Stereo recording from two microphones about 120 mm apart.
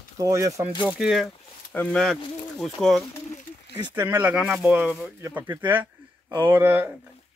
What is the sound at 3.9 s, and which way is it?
Speech, 20° right (ahead or behind).